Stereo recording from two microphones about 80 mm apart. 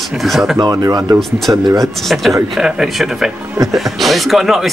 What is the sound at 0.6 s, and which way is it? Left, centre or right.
Speech, right.